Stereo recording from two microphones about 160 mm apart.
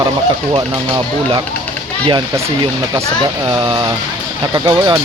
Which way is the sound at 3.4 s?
25° right (ahead or behind).